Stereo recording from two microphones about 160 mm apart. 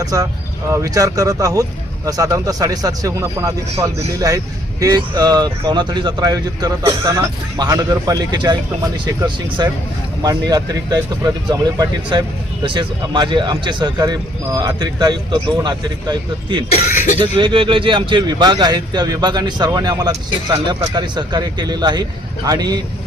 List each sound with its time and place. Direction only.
0.0 s speech: 20° right (ahead or behind)
16.8 s speech: 50° left (ahead or behind)
17.2 s speech: 30° right (ahead or behind)